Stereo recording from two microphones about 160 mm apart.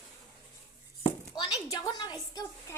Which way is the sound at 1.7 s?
25° left (ahead or behind).